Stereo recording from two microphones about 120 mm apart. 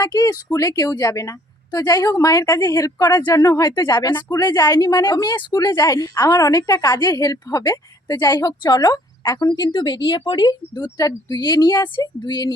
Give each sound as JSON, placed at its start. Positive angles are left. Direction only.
{"t": 0.0, "sound": "a woman's voice", "side_deg": 30}
{"t": 10.3, "sound": "a woman's voice", "side_deg": 35}